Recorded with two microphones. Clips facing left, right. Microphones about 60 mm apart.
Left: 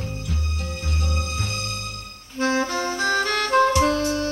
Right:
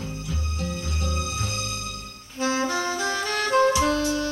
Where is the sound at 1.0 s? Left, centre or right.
Left.